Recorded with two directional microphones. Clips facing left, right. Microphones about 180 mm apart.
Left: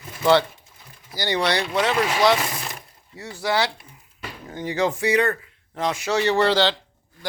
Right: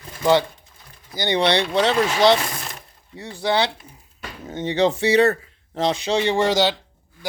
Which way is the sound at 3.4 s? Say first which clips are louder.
Right 2 dB; 25° right (ahead or behind).